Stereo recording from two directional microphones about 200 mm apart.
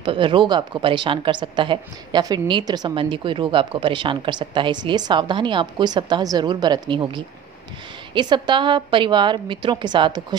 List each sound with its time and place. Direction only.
0.0 s a woman's voice: 25° right (ahead or behind)